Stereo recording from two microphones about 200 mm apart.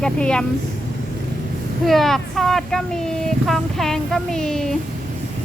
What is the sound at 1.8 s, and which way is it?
Speech, centre (ahead or behind).